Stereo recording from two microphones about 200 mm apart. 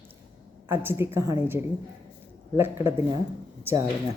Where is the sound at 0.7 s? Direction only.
10° right (ahead or behind).